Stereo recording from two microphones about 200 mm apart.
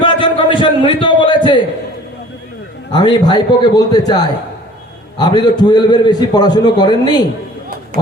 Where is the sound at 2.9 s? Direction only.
20° left (ahead or behind).